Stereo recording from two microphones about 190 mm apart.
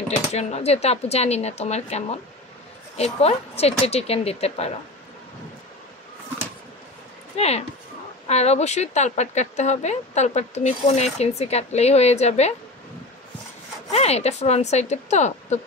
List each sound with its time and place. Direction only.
0.3 s speech: 35° left (ahead or behind)
7.3 s speech: 35° left (ahead or behind)
13.9 s speech: 35° left (ahead or behind)